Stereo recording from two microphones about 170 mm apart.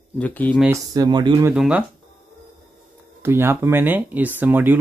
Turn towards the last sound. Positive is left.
turn(degrees=-10)  # may be behind; listen again after turning